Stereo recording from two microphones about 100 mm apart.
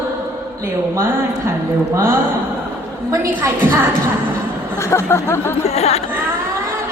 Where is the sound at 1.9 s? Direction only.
25° right (ahead or behind).